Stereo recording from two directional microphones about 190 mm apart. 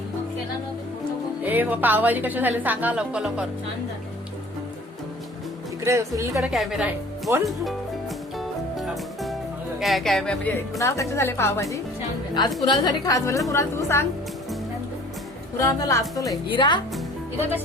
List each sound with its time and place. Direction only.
1.5 s a woman's voice: 10° right (ahead or behind)
5.8 s a woman's voice: 15° right (ahead or behind)
6.4 s speech: centre (ahead or behind)
7.4 s speech: centre (ahead or behind)
8.4 s music: centre (ahead or behind)
9.8 s a woman's voice: centre (ahead or behind)
15.5 s a woman's voice: 15° left (ahead or behind)